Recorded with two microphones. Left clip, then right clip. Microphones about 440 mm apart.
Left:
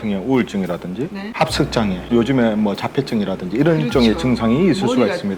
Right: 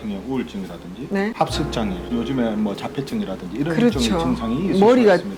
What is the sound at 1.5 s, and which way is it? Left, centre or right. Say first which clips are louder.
Speech: left 5 dB; left.